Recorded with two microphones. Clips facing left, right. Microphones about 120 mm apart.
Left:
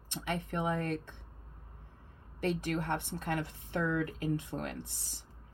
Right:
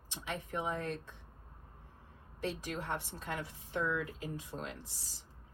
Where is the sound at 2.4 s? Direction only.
55° left (ahead or behind).